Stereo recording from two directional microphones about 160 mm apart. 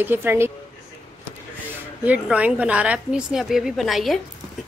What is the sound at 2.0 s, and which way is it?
A woman's voice, 10° right (ahead or behind).